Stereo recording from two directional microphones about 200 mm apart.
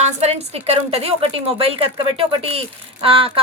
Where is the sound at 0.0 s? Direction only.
30° right (ahead or behind).